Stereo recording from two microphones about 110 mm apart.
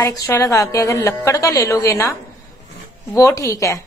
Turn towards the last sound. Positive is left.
turn(degrees=30)  # may be behind; listen again after turning